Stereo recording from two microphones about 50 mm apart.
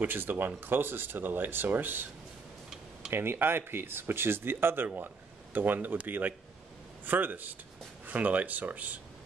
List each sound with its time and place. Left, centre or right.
0.0 s speech: right
3.1 s speech: right